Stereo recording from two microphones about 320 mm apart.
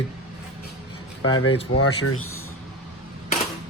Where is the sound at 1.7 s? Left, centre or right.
Left.